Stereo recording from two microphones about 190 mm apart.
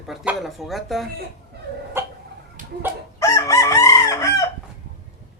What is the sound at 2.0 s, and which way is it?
Cough, 15° right (ahead or behind).